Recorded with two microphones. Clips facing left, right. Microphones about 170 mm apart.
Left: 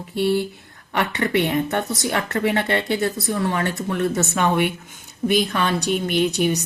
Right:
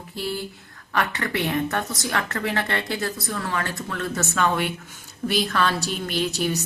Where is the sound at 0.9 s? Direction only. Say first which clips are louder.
Left 5 dB; 25° left (ahead or behind).